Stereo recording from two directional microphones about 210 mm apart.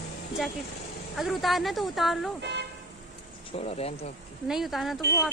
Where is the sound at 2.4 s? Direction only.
55° right (ahead or behind).